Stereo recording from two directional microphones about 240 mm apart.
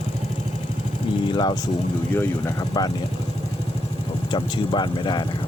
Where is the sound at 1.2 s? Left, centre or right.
Centre.